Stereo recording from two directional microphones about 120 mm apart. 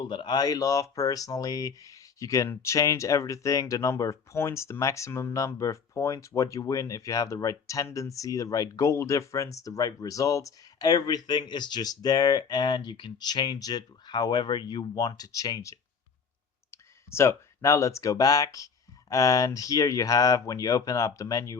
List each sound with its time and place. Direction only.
0.0 s speech: 40° left (ahead or behind)